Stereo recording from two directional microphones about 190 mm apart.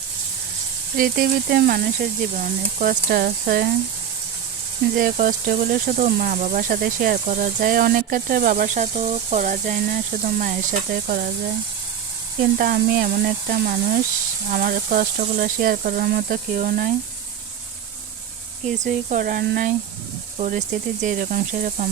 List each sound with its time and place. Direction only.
0.9 s speech: 50° right (ahead or behind)
4.9 s speech: 45° right (ahead or behind)
12.4 s speech: 50° right (ahead or behind)
18.8 s speech: 45° right (ahead or behind)